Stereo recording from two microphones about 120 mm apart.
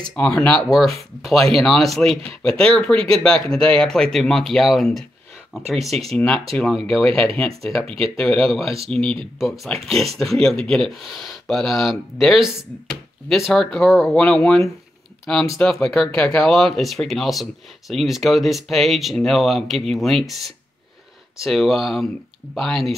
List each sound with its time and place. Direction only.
0.0 s speech: 10° left (ahead or behind)
0.7 s speech: centre (ahead or behind)
9.4 s speech: centre (ahead or behind)